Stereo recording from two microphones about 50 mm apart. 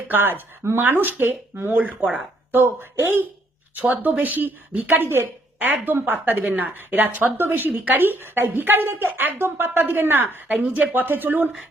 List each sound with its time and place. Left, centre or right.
0.1 s speech: right
0.8 s speech: right
1.7 s speech: right
3.0 s speech: right
7.3 s speech: right
10.5 s speech: right